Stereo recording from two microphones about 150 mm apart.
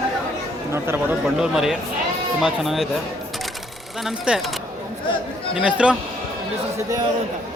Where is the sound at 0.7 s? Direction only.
15° right (ahead or behind).